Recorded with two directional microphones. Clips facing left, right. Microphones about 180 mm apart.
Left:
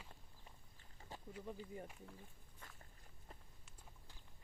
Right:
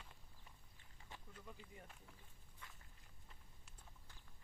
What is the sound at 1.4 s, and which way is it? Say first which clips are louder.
Speech: left 11 dB; 35° left (ahead or behind).